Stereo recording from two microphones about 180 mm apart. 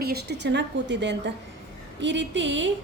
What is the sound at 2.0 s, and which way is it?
Speech, 85° right.